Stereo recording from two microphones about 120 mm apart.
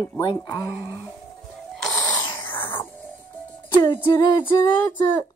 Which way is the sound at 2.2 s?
20° left (ahead or behind).